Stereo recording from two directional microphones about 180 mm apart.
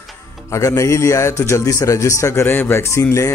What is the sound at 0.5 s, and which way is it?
Speech, 15° left (ahead or behind).